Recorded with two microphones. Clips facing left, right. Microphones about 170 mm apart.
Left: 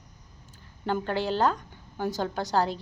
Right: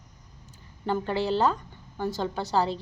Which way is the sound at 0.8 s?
Centre (ahead or behind).